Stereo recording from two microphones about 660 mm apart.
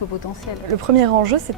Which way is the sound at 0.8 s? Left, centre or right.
Right.